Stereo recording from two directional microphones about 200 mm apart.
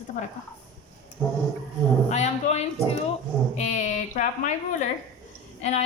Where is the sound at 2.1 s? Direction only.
35° left (ahead or behind).